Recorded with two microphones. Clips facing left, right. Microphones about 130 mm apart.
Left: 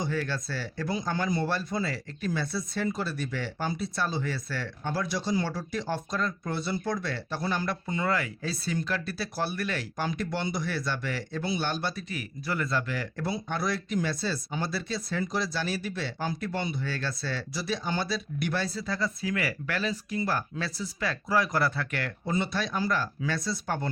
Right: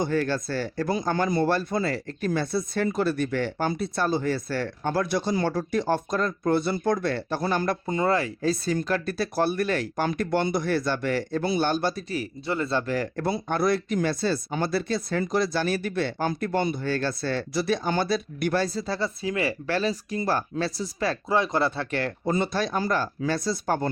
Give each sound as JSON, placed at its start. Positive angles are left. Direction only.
{"t": 0.0, "sound": "speech", "side_deg": -50}
{"t": 12.9, "sound": "speech", "side_deg": -45}
{"t": 22.3, "sound": "speech", "side_deg": -40}